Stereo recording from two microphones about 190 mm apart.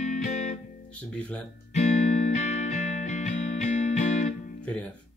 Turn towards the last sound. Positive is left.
turn(degrees=5)  # may be behind; listen again after turning